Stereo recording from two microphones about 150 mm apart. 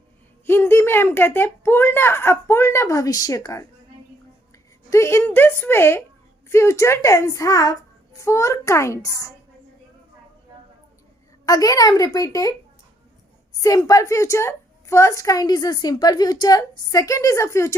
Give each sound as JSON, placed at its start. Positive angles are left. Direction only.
{"t": 0.4, "sound": "speech", "side_deg": 15}
{"t": 4.9, "sound": "a woman's voice", "side_deg": 20}
{"t": 11.4, "sound": "a woman's voice", "side_deg": 25}
{"t": 13.6, "sound": "a woman's voice", "side_deg": 25}